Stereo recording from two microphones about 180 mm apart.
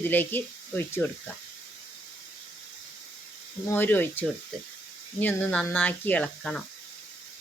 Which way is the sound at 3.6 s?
10° left (ahead or behind).